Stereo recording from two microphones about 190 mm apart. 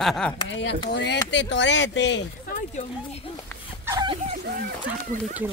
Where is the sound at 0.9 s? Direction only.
65° left (ahead or behind).